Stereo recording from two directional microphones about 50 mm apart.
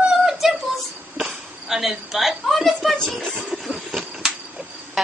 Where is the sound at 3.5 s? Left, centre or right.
Centre.